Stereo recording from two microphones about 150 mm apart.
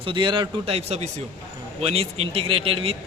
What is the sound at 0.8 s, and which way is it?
A man's voice, 45° right (ahead or behind).